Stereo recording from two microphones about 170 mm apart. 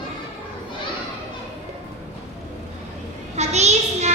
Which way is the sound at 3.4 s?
40° right (ahead or behind).